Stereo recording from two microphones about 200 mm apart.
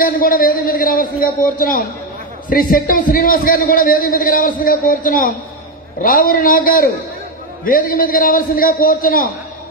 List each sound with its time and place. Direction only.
0.0 s a man's voice: 45° left (ahead or behind)